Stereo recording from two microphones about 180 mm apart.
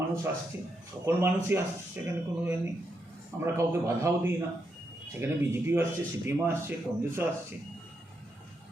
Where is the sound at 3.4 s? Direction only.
15° right (ahead or behind).